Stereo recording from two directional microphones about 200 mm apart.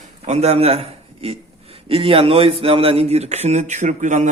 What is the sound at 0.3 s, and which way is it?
A man's voice, 30° right (ahead or behind).